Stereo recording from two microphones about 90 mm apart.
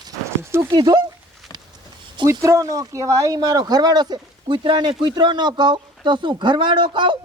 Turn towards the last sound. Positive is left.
turn(degrees=-65)  # may be behind; listen again after turning